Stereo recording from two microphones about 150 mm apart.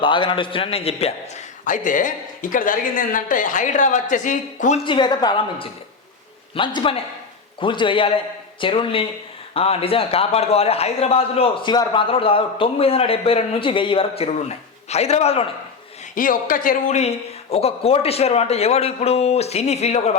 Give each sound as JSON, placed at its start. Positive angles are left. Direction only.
{"t": 0.0, "sound": "a man's voice", "side_deg": 35}
{"t": 1.6, "sound": "speech", "side_deg": 60}
{"t": 4.9, "sound": "a woman's voice", "side_deg": 30}
{"t": 16.1, "sound": "speech", "side_deg": 65}